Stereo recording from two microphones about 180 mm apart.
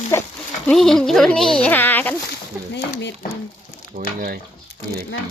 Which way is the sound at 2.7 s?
75° left (ahead or behind).